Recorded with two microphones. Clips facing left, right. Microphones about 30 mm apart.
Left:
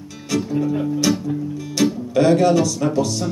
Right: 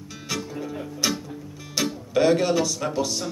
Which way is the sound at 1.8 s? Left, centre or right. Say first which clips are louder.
Left 5 dB; centre.